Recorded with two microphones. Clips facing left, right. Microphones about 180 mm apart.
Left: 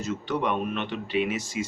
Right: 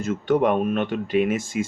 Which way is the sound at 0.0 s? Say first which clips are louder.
Right 8 dB; 50° right (ahead or behind).